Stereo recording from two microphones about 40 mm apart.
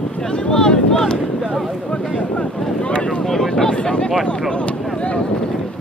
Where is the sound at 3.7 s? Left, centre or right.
Left.